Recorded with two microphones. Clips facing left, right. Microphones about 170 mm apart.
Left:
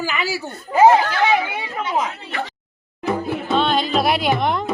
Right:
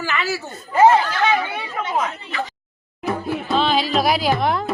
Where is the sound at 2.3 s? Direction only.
60° left (ahead or behind).